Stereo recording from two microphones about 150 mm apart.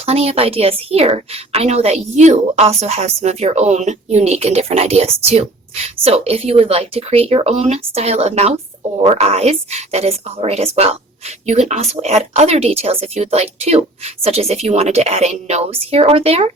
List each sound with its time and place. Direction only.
0.0 s a woman's voice: 40° right (ahead or behind)